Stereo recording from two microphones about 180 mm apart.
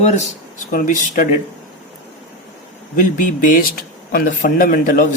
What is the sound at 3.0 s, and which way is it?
Speech, 50° left (ahead or behind).